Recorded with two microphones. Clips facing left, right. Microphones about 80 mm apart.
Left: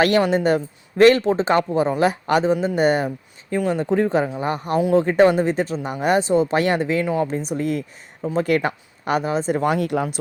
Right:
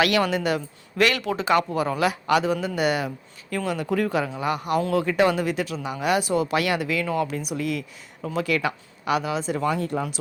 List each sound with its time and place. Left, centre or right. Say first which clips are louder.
0.2 s speech: left 5 dB; left
9.6 s speech: left 2 dB; left